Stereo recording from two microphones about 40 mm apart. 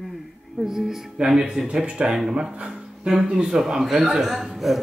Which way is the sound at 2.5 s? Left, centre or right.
Right.